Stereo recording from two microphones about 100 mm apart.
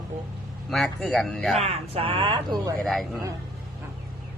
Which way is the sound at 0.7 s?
Centre (ahead or behind).